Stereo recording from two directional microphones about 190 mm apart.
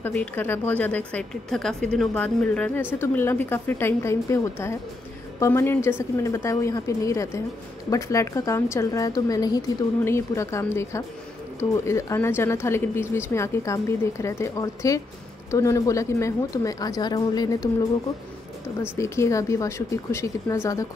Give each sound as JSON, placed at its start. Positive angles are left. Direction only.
{"t": 0.0, "sound": "a woman's voice", "side_deg": 10}
{"t": 18.8, "sound": "a woman's voice", "side_deg": 15}